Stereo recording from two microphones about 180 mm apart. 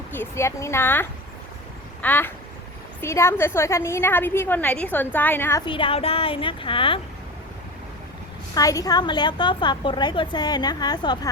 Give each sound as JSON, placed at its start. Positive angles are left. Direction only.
{"t": 0.1, "sound": "a woman's voice", "side_deg": 15}
{"t": 5.6, "sound": "a woman's voice", "side_deg": 30}
{"t": 8.5, "sound": "a woman's voice", "side_deg": 20}